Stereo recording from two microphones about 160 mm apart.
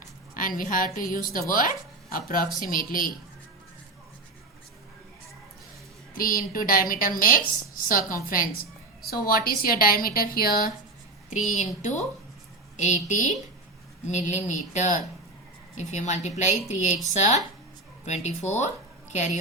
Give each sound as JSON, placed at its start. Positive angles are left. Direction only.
{"t": 0.3, "sound": "speech", "side_deg": 55}
{"t": 6.1, "sound": "a woman's voice", "side_deg": 60}
{"t": 11.3, "sound": "a woman's voice", "side_deg": 50}
{"t": 18.0, "sound": "a woman's voice", "side_deg": 45}